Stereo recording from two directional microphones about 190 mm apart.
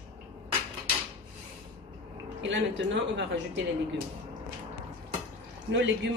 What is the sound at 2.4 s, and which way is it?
Speech, 70° right (ahead or behind).